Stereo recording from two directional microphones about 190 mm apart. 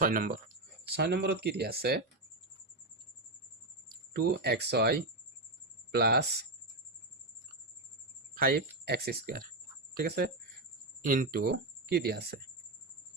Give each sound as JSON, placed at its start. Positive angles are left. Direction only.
{"t": 0.0, "sound": "speech", "side_deg": -50}
{"t": 0.9, "sound": "speech", "side_deg": -60}
{"t": 3.8, "sound": "speech", "side_deg": -55}
{"t": 8.4, "sound": "speech", "side_deg": -55}